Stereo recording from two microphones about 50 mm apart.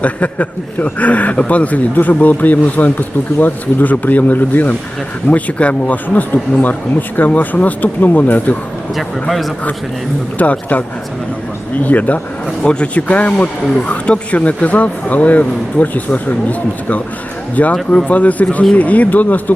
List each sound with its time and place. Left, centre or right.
0.0 s a man's voice: left
10.3 s a man's voice: left